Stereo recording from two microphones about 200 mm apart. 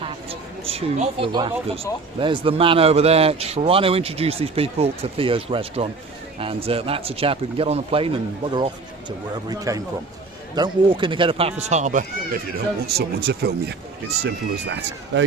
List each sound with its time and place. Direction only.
0.0 s speech: 30° right (ahead or behind)
11.7 s speech: 35° right (ahead or behind)
12.5 s speech: 50° right (ahead or behind)